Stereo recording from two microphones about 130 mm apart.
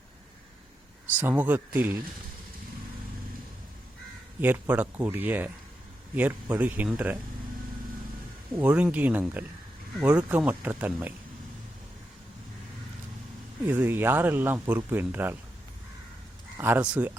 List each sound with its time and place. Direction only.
1.1 s speech: 15° right (ahead or behind)
4.4 s speech: 15° right (ahead or behind)
6.5 s speech: 15° right (ahead or behind)
8.5 s speech: 10° right (ahead or behind)
13.7 s speech: 15° right (ahead or behind)
16.6 s speech: 15° right (ahead or behind)